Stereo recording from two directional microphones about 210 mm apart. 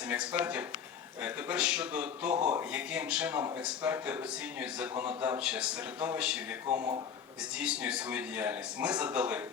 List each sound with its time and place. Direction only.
0.1 s speech: 5° right (ahead or behind)
6.7 s speech: 20° right (ahead or behind)
7.5 s speech: 5° right (ahead or behind)